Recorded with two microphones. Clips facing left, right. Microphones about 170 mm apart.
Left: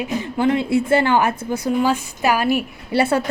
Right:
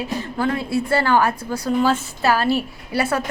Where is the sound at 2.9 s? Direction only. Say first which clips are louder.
Left 4 dB; 30° left (ahead or behind).